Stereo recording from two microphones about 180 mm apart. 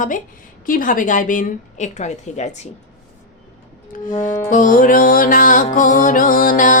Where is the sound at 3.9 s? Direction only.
45° left (ahead or behind).